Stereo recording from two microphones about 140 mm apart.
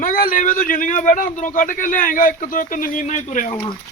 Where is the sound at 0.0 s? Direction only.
90° left; by 3.5 s 60° left (ahead or behind).